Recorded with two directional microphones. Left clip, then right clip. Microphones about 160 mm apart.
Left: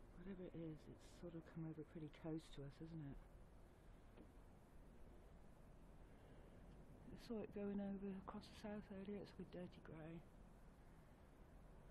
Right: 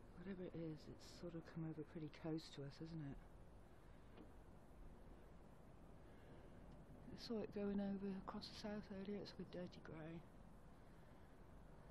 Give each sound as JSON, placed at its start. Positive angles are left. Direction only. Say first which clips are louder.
{"t": 0.2, "sound": "speech", "louder": "right 3 dB", "side_deg": 0}
{"t": 7.2, "sound": "speech", "louder": "right 3 dB", "side_deg": 5}